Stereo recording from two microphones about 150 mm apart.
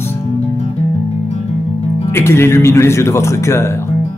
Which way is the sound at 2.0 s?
15° left (ahead or behind).